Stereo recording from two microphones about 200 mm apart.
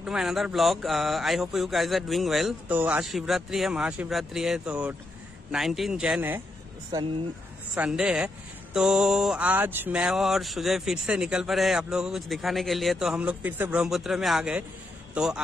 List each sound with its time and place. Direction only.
0.0 s mantra: centre (ahead or behind)
7.7 s mantra: 5° right (ahead or behind)